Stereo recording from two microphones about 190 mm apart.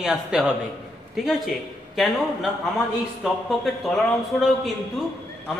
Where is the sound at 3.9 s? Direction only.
5° left (ahead or behind).